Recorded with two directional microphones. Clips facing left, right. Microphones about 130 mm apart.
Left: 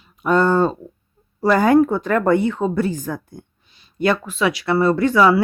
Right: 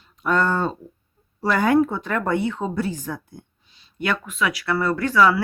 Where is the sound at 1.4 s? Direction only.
40° left (ahead or behind).